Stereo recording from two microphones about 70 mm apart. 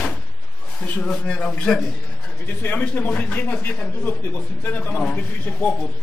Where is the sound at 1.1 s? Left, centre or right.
Centre.